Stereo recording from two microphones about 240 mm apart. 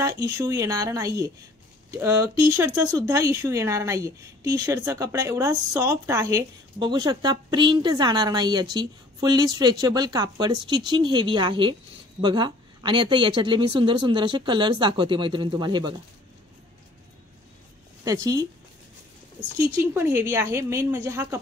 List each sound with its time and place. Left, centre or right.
0.0 s a woman's voice: centre
18.0 s a woman's voice: centre
19.5 s a woman's voice: centre